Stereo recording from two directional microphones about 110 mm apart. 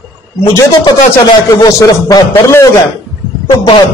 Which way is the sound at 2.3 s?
25° left (ahead or behind).